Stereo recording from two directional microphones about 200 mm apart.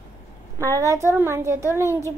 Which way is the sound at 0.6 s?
15° right (ahead or behind).